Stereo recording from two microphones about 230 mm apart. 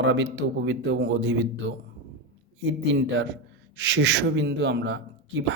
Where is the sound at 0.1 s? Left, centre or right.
Right.